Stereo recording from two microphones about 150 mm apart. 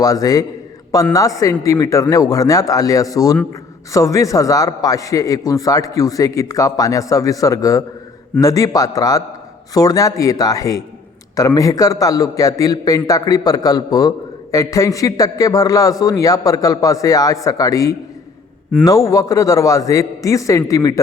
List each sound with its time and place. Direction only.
0.0 s a man's voice: 25° left (ahead or behind)